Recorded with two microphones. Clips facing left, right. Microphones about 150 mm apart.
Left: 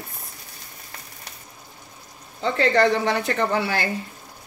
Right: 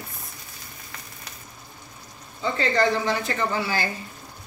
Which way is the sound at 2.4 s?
70° left (ahead or behind).